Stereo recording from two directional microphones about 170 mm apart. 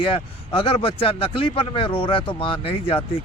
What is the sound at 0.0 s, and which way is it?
A man's voice, 30° left (ahead or behind).